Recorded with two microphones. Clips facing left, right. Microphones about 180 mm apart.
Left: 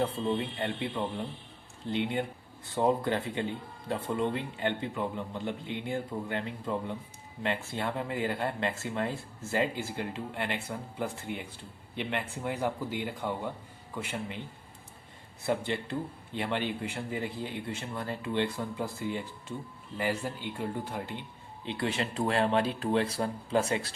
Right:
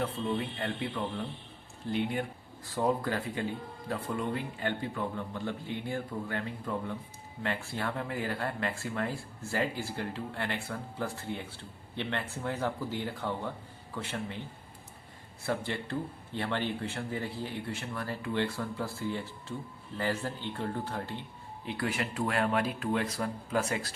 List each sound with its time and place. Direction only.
0.0 s a man's voice: 25° left (ahead or behind)
15.4 s a man's voice: 20° left (ahead or behind)